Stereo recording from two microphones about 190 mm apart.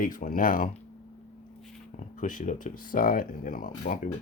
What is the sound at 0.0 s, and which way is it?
Speech, 45° left (ahead or behind).